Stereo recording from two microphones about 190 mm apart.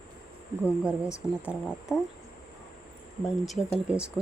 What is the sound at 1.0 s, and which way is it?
Speech, 15° left (ahead or behind).